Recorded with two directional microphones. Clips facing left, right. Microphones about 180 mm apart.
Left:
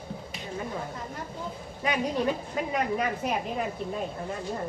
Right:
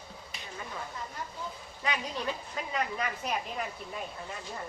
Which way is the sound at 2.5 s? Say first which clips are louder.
Left 6 dB; 25° left (ahead or behind).